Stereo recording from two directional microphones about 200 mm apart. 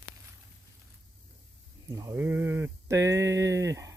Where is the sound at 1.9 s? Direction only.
15° right (ahead or behind).